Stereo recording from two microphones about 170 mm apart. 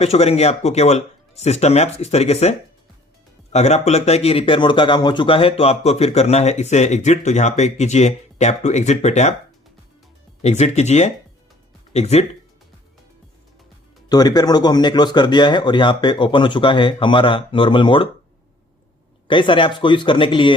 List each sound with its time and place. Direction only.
0.0 s speech: 40° left (ahead or behind)
10.4 s speech: 40° left (ahead or behind)
14.1 s speech: 25° left (ahead or behind)
19.3 s speech: 30° left (ahead or behind)